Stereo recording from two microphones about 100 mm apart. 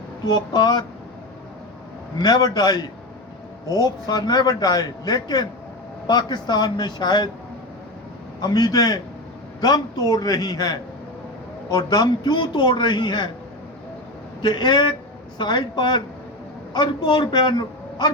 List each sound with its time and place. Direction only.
0.3 s a man's voice: 45° left (ahead or behind)
2.1 s a man's voice: 45° left (ahead or behind)
8.4 s a man's voice: 40° left (ahead or behind)
14.4 s a man's voice: 50° left (ahead or behind)